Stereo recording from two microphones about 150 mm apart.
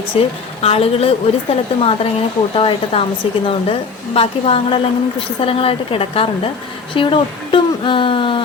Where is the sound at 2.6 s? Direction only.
40° left (ahead or behind).